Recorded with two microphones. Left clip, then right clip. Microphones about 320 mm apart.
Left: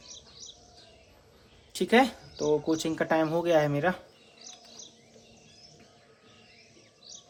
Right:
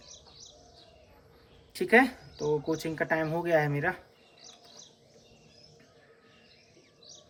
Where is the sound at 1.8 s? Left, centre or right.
Centre.